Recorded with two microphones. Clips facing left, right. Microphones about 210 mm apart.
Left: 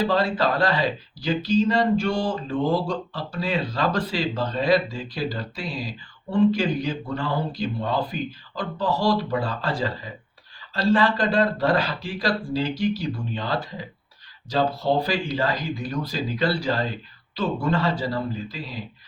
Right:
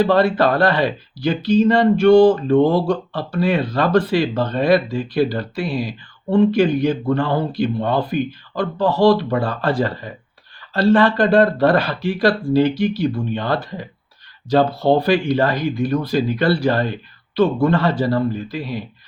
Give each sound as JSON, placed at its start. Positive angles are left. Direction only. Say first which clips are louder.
{"t": 0.0, "sound": "speech", "louder": "right 7 dB", "side_deg": -60}